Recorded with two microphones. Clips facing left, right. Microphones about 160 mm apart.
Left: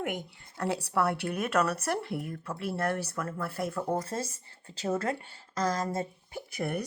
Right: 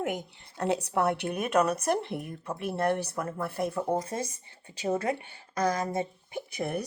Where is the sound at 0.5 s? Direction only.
20° right (ahead or behind).